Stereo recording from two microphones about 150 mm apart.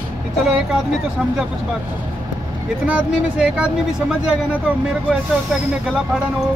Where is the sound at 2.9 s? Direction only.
5° right (ahead or behind).